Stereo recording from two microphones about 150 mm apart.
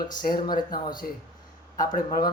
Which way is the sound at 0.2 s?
70° left (ahead or behind).